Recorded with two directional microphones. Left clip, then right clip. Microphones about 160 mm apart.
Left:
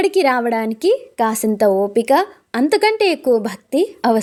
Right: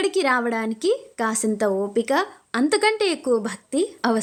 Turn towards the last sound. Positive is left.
turn(degrees=20)  # may be behind; listen again after turning